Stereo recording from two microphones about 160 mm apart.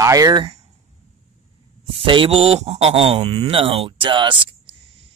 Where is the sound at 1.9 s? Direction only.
35° right (ahead or behind).